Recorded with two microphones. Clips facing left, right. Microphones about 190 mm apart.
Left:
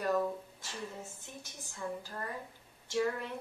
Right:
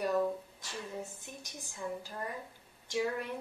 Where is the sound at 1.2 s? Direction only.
15° right (ahead or behind).